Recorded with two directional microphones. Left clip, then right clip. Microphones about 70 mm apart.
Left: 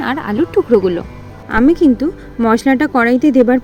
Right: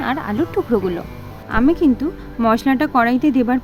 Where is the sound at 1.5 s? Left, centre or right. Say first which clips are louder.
Left 5 dB; left.